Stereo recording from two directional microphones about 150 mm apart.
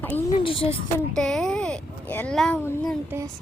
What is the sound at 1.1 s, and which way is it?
A child's voice, 5° left (ahead or behind).